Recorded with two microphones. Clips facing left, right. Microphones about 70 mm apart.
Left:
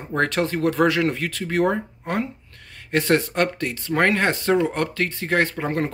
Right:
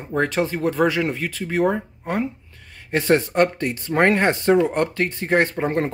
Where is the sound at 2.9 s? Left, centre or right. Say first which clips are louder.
Right 2 dB; centre.